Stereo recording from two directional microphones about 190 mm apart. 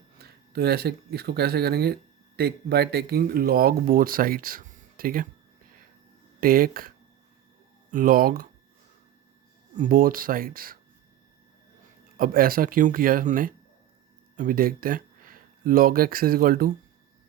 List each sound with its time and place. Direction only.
0.2 s speech: 55° right (ahead or behind)
6.4 s speech: 50° right (ahead or behind)
9.7 s speech: 45° right (ahead or behind)
12.1 s speech: 50° right (ahead or behind)